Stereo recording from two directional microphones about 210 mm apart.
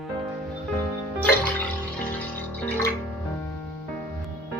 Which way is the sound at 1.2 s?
10° left (ahead or behind).